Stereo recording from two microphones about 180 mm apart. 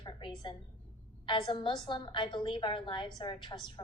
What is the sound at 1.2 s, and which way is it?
A woman's voice, 25° left (ahead or behind).